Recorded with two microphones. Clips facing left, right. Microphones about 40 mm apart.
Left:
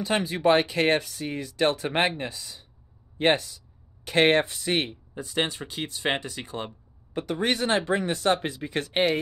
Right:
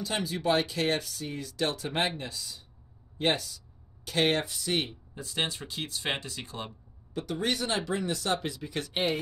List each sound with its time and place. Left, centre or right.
0.0 s speech: left
5.1 s speech: centre
7.2 s speech: left